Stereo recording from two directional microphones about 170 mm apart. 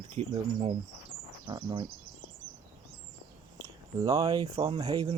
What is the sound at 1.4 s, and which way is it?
Speech, 30° right (ahead or behind).